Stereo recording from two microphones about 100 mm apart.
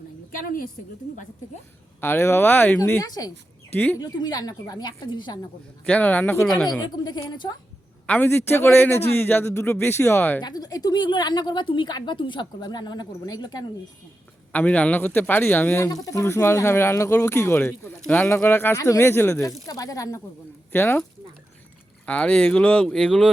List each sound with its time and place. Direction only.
2.0 s speech: 20° left (ahead or behind)
3.0 s a woman's voice: 40° left (ahead or behind)
5.8 s speech: 15° left (ahead or behind)
6.4 s speech: 5° left (ahead or behind)
6.9 s a woman's voice: 45° left (ahead or behind)
8.0 s a man's voice: 15° left (ahead or behind)
8.3 s speech: 25° left (ahead or behind)
10.4 s a woman's voice: 40° left (ahead or behind)
14.5 s speech: 15° left (ahead or behind)
15.8 s speech: 35° left (ahead or behind)
20.7 s speech: 20° left (ahead or behind)
22.0 s speech: 10° left (ahead or behind)